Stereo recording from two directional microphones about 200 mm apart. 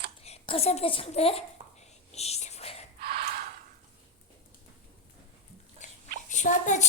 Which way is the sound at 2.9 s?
50° right (ahead or behind).